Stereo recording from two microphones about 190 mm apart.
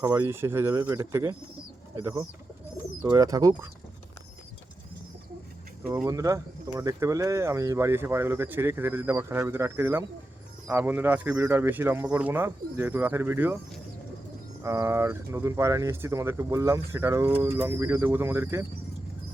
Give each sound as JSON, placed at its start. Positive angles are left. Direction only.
{"t": 0.0, "sound": "speech", "side_deg": -10}
{"t": 5.8, "sound": "speech", "side_deg": -5}
{"t": 6.1, "sound": "speech", "side_deg": -15}
{"t": 14.6, "sound": "speech", "side_deg": -15}